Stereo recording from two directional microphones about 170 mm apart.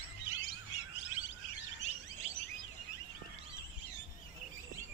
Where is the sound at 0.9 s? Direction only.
90° left.